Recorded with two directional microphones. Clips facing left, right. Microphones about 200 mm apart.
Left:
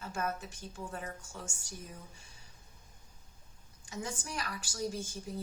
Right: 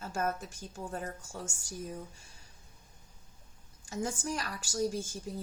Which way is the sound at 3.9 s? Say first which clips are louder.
Right 5 dB; 45° right (ahead or behind).